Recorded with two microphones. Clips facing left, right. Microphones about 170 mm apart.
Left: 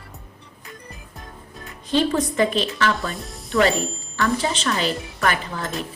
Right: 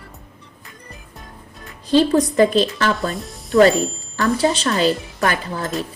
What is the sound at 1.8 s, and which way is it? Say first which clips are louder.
Speech: right 5 dB; 35° right (ahead or behind).